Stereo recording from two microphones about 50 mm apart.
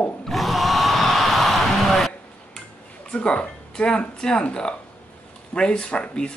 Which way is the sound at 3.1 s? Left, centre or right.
Left.